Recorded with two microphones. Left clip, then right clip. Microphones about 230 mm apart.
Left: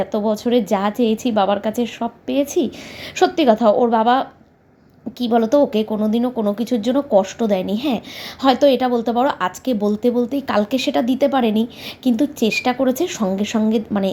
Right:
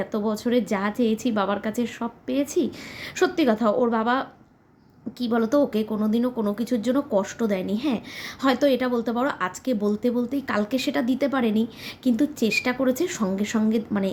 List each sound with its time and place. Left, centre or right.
0.0 s a woman's voice: centre